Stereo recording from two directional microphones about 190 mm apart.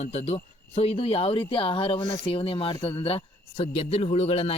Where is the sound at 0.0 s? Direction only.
35° left (ahead or behind).